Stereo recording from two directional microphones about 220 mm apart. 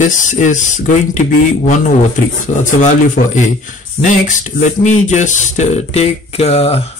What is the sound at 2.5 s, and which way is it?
Speech, 35° left (ahead or behind).